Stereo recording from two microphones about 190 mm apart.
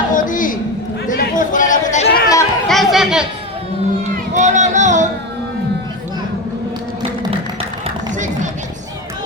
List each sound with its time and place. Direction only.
0.1 s a man's voice: 45° left (ahead or behind)
1.0 s chatter: 45° left (ahead or behind)
2.0 s chatter: 50° left (ahead or behind)
2.6 s chatter: centre (ahead or behind)
4.4 s music: 40° right (ahead or behind)